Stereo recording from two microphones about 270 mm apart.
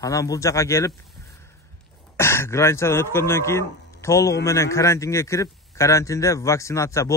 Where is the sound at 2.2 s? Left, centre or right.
Centre.